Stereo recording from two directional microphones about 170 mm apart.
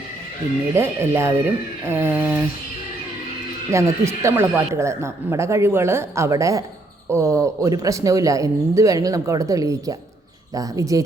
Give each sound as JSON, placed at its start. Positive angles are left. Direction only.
{"t": 0.7, "sound": "speech", "side_deg": -15}
{"t": 3.7, "sound": "speech", "side_deg": -15}